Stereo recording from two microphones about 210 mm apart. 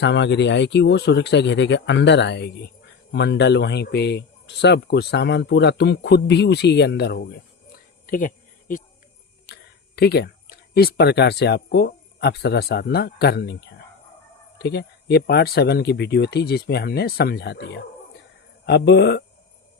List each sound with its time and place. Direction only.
0.0 s speech: 60° left (ahead or behind)
8.0 s insect: 40° left (ahead or behind)
9.5 s a sound: 50° left (ahead or behind)
10.8 s speech: 50° left (ahead or behind)